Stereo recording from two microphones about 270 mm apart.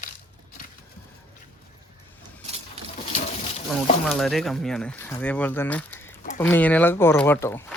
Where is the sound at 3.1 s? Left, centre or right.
Left.